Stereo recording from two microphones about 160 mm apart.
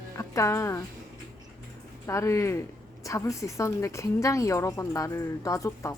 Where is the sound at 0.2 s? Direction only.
20° left (ahead or behind).